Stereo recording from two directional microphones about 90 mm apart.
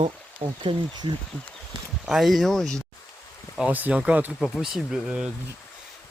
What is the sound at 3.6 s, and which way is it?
Speech, 15° right (ahead or behind).